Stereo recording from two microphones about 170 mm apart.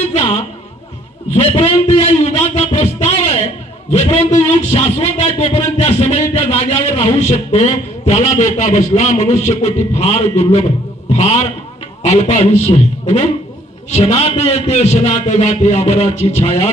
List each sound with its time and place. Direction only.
0.1 s music: 40° left (ahead or behind)
1.3 s a sound: 35° left (ahead or behind)
3.8 s a man's voice: 40° left (ahead or behind)